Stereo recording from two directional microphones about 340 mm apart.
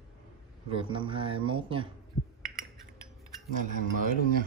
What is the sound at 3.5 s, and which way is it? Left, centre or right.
Speech, right.